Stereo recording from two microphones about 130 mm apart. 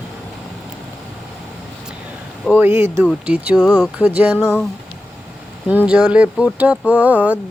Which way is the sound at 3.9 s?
10° right (ahead or behind).